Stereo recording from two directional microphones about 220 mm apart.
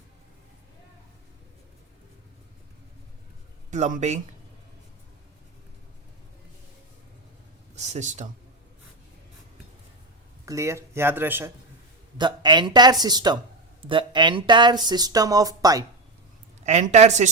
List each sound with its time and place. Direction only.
3.7 s speech: 35° right (ahead or behind)
7.8 s speech: 30° right (ahead or behind)
10.4 s speech: 15° right (ahead or behind)
12.1 s speech: 20° right (ahead or behind)
16.6 s speech: 30° right (ahead or behind)